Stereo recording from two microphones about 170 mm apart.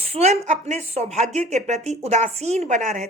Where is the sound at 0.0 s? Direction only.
40° right (ahead or behind).